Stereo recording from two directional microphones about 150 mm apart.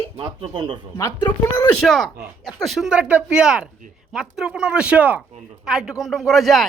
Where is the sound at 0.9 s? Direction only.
20° left (ahead or behind).